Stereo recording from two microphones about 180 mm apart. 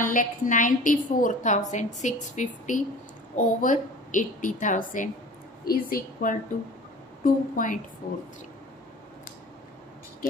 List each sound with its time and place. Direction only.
0.1 s a woman's voice: 45° left (ahead or behind)